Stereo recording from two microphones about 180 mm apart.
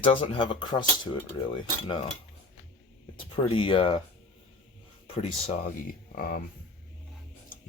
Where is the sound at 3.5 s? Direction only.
30° left (ahead or behind).